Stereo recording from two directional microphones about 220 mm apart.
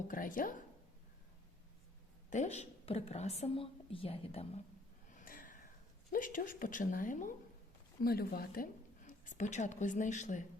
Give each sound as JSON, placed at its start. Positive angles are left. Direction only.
{"t": 0.1, "sound": "a woman's voice", "side_deg": 40}
{"t": 2.3, "sound": "a woman's voice", "side_deg": 30}
{"t": 5.1, "sound": "a sound", "side_deg": 40}
{"t": 6.1, "sound": "a woman's voice", "side_deg": 40}